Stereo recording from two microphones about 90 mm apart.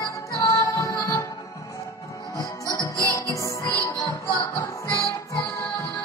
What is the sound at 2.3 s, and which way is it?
Music, 35° left (ahead or behind).